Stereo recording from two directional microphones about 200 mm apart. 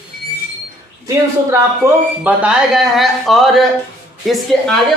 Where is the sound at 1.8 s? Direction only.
15° right (ahead or behind).